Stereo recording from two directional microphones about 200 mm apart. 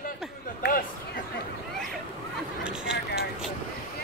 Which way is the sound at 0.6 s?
45° left (ahead or behind).